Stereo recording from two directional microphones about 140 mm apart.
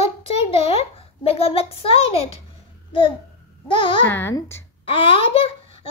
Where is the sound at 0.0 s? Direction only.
45° left (ahead or behind).